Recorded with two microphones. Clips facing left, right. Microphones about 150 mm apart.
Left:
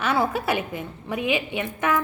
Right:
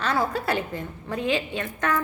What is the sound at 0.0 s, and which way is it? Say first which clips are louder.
A woman's voice: left 2 dB; 10° left (ahead or behind).